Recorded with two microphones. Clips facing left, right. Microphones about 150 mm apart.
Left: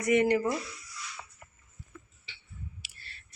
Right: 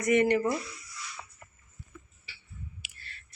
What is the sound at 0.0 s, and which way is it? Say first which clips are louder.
Speech: right 1 dB; 15° left (ahead or behind).